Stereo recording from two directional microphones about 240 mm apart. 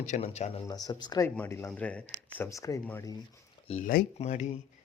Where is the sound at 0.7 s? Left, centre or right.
Centre.